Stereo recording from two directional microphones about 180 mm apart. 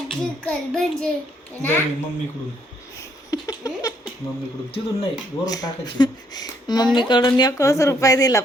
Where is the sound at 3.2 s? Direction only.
20° left (ahead or behind).